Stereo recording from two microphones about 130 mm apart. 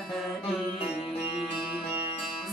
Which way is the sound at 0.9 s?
55° left (ahead or behind).